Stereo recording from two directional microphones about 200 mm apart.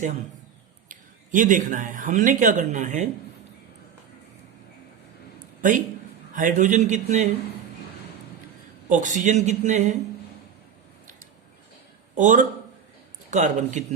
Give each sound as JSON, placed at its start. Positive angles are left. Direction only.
{"t": 0.9, "sound": "speech", "side_deg": -40}
{"t": 6.3, "sound": "speech", "side_deg": -40}
{"t": 8.9, "sound": "speech", "side_deg": -40}
{"t": 12.1, "sound": "speech", "side_deg": -40}